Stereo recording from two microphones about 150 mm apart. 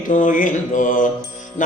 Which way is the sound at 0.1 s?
60° left (ahead or behind).